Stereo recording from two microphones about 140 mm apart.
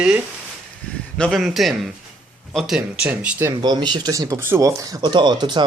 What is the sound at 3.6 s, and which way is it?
Speech, 30° right (ahead or behind).